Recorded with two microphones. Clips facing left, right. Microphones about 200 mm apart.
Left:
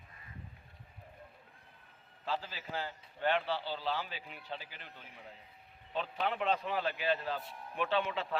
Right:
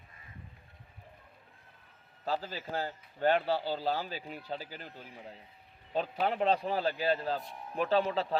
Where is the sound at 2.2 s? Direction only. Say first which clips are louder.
Right 4 dB; 40° right (ahead or behind).